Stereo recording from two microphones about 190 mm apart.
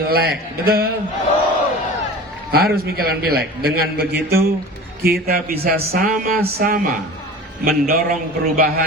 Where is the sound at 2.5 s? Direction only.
55° right (ahead or behind).